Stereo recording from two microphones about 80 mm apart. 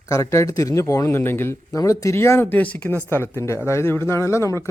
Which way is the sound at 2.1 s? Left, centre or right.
Left.